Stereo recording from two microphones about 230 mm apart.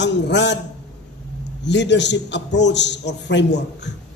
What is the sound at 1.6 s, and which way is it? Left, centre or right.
A man's voice, left.